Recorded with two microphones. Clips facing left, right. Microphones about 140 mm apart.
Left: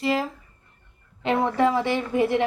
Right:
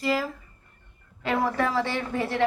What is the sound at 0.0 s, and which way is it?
A woman's voice, 25° left (ahead or behind).